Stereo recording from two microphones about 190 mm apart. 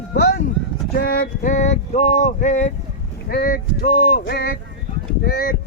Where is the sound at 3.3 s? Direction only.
50° left (ahead or behind).